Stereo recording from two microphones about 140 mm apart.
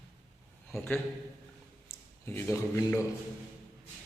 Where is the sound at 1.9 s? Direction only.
15° left (ahead or behind).